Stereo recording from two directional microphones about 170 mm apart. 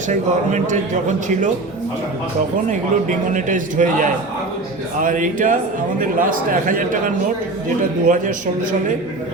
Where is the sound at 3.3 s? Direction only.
50° right (ahead or behind).